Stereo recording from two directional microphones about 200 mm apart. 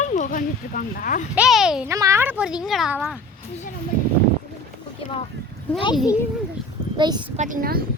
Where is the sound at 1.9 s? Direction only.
15° right (ahead or behind).